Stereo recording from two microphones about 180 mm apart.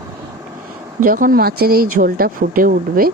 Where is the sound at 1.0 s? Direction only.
50° right (ahead or behind).